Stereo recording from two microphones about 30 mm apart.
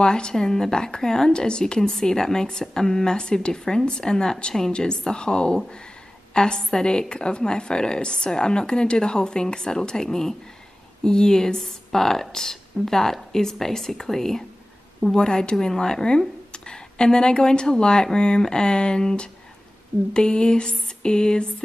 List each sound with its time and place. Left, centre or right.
0.0 s a woman's voice: left
15.1 s a woman's voice: left
15.5 s a woman's voice: centre